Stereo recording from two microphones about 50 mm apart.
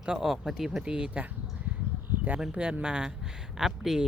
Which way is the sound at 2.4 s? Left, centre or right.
Centre.